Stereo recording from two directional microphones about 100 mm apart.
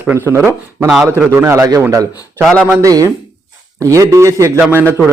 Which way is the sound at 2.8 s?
35° right (ahead or behind).